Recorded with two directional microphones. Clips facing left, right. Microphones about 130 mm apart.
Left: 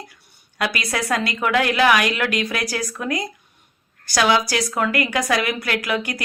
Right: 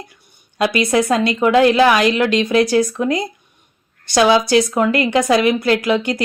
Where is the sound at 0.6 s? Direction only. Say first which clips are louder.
Right 9 dB; 25° right (ahead or behind).